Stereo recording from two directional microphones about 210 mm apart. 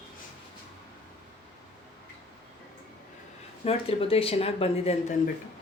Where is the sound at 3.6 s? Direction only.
25° left (ahead or behind).